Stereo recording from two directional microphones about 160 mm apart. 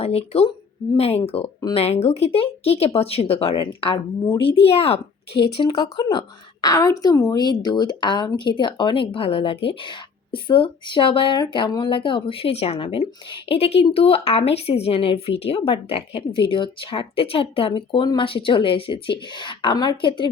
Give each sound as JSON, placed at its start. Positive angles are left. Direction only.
{"t": 0.0, "sound": "a woman's voice", "side_deg": 40}
{"t": 5.5, "sound": "a woman's voice", "side_deg": 25}